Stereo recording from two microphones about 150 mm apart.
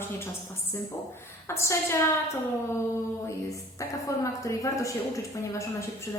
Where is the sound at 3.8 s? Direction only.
20° left (ahead or behind).